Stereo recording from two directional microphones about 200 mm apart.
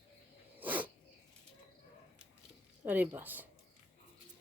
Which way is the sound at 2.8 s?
10° right (ahead or behind).